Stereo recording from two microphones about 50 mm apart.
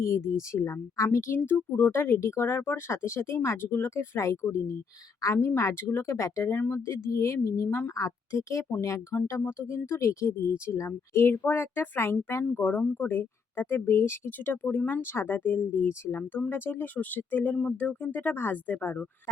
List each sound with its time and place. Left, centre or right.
0.0 s speech: left
1.4 s speech: left
5.2 s speech: left
5.5 s speech: left
6.5 s speech: left
7.4 s speech: left
7.7 s speech: left
8.0 s speech: left
9.1 s speech: left
9.5 s speech: left
12.6 s speech: left
13.1 s speech: left
15.0 s speech: left
18.2 s speech: left